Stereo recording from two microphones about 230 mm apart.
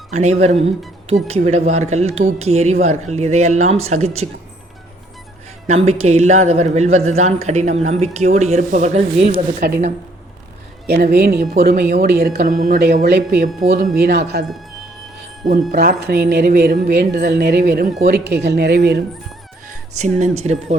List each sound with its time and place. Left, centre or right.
0.1 s speech: right
5.6 s speech: right
9.2 s speech: right
10.8 s a woman's voice: right
15.7 s a woman's voice: right
20.0 s speech: right